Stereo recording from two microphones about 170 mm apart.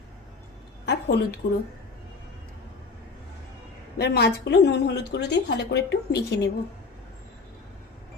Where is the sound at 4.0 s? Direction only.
70° left (ahead or behind); by 6.5 s 90° left.